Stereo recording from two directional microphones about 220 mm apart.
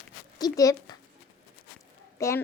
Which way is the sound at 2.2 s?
15° left (ahead or behind).